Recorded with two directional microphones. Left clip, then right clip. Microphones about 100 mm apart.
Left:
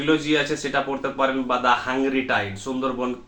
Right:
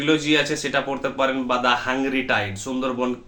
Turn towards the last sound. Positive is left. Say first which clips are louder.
# right 1 dB
turn(degrees=-15)  # may be behind; listen again after turning